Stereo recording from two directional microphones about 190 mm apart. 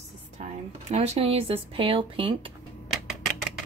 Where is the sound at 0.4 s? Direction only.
35° right (ahead or behind).